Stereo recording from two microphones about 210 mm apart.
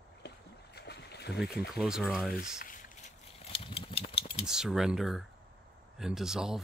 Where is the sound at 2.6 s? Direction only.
40° left (ahead or behind).